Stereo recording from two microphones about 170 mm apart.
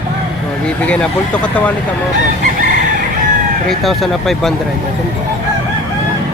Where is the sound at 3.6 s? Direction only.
Centre (ahead or behind).